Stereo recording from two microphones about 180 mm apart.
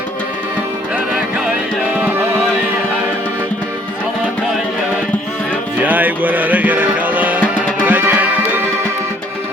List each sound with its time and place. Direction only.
5.8 s music: 10° right (ahead or behind)